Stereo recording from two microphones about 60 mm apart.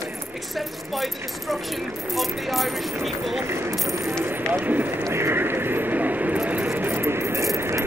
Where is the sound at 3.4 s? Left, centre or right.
Right.